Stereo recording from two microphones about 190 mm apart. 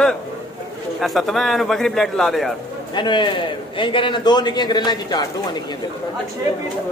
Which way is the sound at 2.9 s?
25° left (ahead or behind).